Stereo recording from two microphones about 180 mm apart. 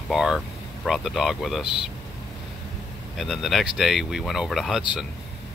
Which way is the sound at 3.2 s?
Centre (ahead or behind).